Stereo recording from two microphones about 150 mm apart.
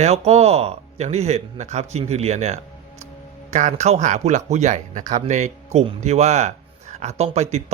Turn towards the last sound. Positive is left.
turn(degrees=-45)  # may be behind; listen again after turning